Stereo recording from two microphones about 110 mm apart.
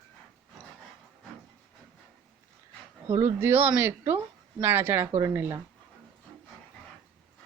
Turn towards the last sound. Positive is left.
turn(degrees=-25)  # may be behind; listen again after turning